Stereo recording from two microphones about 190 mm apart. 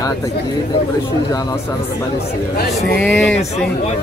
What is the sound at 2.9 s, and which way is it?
Speech, 5° left (ahead or behind).